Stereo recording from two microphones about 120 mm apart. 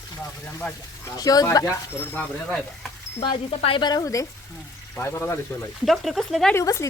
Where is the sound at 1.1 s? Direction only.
30° left (ahead or behind).